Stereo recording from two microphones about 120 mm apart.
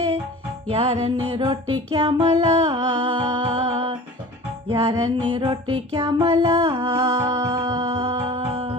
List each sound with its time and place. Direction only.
0.7 s music: 50° right (ahead or behind)
4.9 s music: 35° right (ahead or behind)
7.3 s music: 30° right (ahead or behind)
7.8 s music: 45° right (ahead or behind)